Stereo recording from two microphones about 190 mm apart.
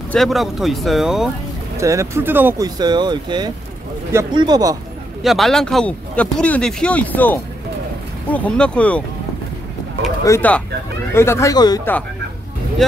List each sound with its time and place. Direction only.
0.1 s speech: centre (ahead or behind)
1.8 s speech: 15° right (ahead or behind)
2.8 s speech: 25° right (ahead or behind)
5.2 s speech: centre (ahead or behind)
10.2 s speech: 10° left (ahead or behind)